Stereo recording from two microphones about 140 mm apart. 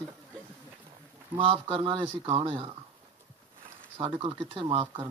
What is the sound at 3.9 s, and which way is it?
Speech, 45° right (ahead or behind).